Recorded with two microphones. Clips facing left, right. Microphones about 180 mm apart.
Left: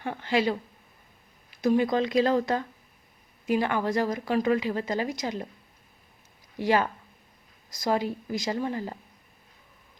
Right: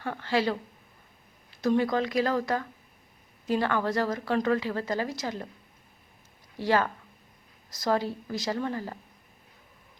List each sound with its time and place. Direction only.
0.0 s a woman's voice: 15° left (ahead or behind)
1.6 s a woman's voice: 15° left (ahead or behind)
6.6 s a woman's voice: 15° left (ahead or behind)